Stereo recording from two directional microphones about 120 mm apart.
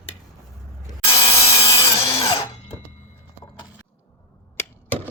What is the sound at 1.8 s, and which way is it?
Tools, 50° left (ahead or behind).